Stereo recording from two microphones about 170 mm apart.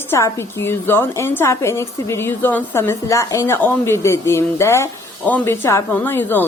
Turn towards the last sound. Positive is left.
turn(degrees=10)  # may be behind; listen again after turning